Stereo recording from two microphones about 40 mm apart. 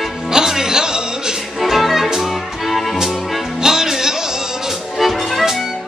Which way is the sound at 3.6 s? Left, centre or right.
Centre.